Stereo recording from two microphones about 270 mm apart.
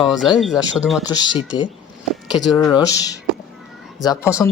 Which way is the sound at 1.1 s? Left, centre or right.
Centre.